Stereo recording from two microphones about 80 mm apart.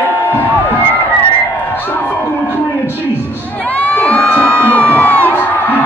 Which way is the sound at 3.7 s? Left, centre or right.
Centre.